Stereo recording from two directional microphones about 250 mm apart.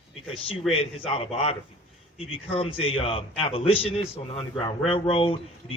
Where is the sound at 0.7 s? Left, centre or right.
Left.